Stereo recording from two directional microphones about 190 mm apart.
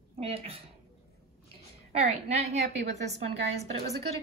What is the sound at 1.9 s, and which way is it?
Speech, 35° right (ahead or behind).